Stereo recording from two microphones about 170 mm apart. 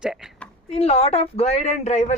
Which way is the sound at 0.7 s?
35° left (ahead or behind).